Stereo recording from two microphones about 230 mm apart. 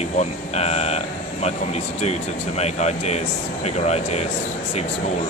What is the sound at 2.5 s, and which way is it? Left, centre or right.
Speech, left.